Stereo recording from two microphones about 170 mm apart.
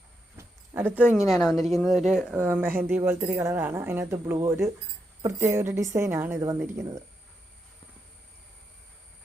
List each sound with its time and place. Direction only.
0.3 s speech: 15° right (ahead or behind)